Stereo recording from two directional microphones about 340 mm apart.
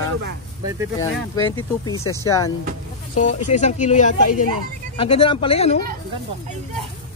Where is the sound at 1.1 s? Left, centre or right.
Centre.